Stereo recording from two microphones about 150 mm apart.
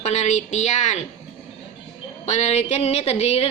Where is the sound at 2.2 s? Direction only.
45° left (ahead or behind).